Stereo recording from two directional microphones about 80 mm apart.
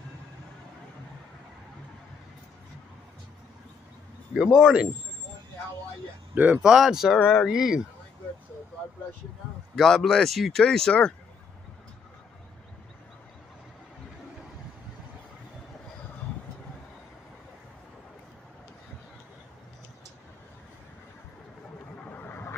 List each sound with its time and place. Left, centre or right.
4.3 s speech: centre
6.5 s speech: centre
9.8 s speech: centre
21.9 s vehicle: left